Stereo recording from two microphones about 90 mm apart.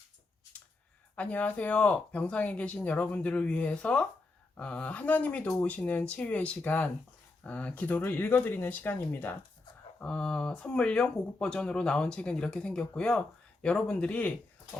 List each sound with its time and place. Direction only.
1.1 s speech: 15° left (ahead or behind)
10.0 s speech: 10° left (ahead or behind)